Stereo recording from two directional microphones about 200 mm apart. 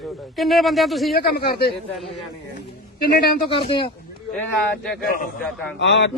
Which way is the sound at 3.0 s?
50° left (ahead or behind).